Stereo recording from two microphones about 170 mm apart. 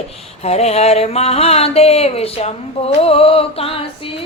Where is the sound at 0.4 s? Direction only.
40° left (ahead or behind).